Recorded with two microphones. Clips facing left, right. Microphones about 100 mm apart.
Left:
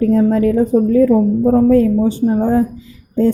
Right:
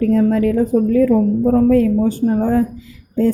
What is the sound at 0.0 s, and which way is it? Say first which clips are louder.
A woman's voice: left 2 dB; 25° left (ahead or behind).